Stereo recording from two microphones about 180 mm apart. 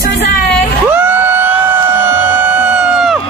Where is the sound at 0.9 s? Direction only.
10° right (ahead or behind).